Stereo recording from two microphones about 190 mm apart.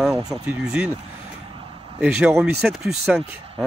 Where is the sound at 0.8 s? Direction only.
5° right (ahead or behind).